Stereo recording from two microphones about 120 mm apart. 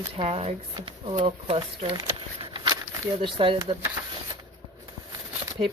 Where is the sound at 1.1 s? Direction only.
60° right (ahead or behind).